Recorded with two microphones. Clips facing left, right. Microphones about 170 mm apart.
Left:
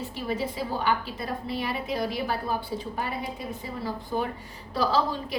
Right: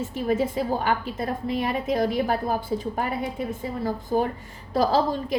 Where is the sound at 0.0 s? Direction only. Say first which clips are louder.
Right 6 dB; 45° right (ahead or behind).